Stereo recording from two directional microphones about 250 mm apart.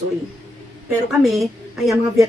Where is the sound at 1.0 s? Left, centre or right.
Centre.